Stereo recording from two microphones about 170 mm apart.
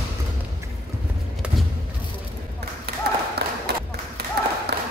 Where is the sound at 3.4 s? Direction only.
70° right (ahead or behind).